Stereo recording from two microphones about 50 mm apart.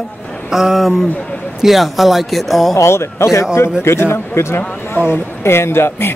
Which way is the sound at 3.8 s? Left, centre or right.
Left.